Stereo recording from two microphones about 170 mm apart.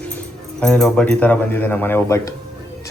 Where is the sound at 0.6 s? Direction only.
5° left (ahead or behind).